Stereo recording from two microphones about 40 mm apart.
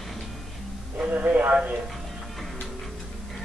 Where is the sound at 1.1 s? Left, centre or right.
Right.